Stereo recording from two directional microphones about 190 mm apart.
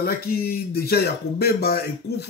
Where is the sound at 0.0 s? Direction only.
55° left (ahead or behind).